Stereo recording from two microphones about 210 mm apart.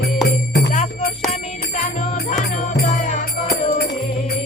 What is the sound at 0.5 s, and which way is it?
Jingle bell, 35° left (ahead or behind).